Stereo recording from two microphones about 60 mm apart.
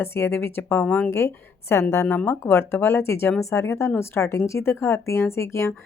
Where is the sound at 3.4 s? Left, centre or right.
Left.